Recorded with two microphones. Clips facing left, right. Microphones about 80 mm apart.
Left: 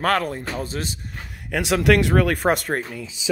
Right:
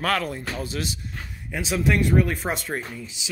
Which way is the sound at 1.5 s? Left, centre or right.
Left.